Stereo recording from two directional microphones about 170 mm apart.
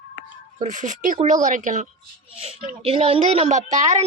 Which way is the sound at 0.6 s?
50° right (ahead or behind).